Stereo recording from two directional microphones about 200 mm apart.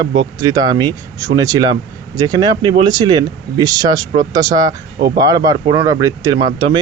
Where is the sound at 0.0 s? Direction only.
20° right (ahead or behind).